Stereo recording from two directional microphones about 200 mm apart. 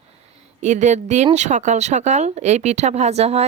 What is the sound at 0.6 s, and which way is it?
Speech, 35° right (ahead or behind).